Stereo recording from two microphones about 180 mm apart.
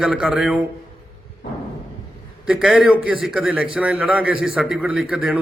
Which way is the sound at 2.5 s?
5° right (ahead or behind).